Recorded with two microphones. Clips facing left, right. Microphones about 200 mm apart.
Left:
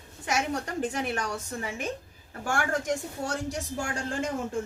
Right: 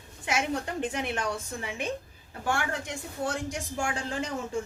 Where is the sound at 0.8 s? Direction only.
40° left (ahead or behind).